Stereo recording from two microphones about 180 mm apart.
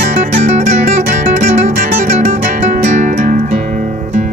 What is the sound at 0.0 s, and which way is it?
Music, 45° right (ahead or behind).